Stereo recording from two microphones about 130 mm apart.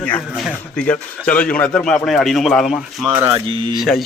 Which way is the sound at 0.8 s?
10° left (ahead or behind).